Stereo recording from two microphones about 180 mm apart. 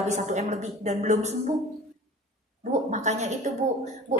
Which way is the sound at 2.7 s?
40° right (ahead or behind).